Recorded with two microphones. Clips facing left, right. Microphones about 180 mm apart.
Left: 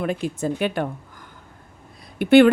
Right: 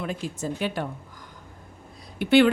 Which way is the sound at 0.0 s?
55° left (ahead or behind).